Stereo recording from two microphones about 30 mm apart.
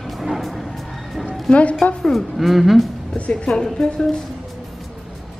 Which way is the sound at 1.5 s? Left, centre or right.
Left.